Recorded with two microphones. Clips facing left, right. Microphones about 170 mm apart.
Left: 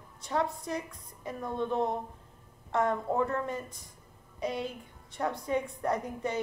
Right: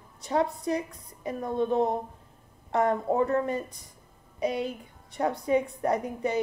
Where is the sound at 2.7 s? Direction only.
15° right (ahead or behind).